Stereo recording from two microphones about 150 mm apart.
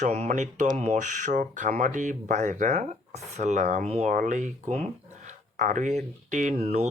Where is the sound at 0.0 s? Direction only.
50° right (ahead or behind).